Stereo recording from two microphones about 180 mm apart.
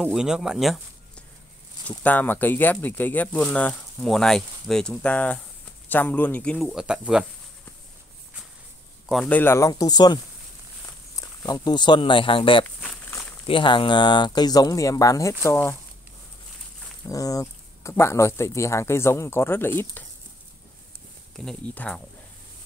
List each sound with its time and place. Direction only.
0.0 s speech: 5° right (ahead or behind)
1.9 s speech: 10° left (ahead or behind)
9.1 s speech: 10° left (ahead or behind)
11.1 s speech: 20° left (ahead or behind)
17.1 s speech: 20° left (ahead or behind)
21.5 s speech: 5° left (ahead or behind)